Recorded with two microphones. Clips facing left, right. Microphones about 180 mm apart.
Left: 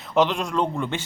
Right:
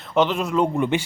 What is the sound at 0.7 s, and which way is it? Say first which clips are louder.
Speech: right 6 dB; 20° right (ahead or behind).